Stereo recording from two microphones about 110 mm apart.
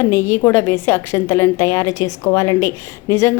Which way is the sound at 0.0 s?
25° left (ahead or behind).